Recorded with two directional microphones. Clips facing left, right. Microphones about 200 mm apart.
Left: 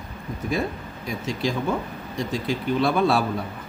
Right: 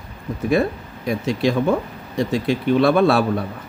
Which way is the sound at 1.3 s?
60° right (ahead or behind).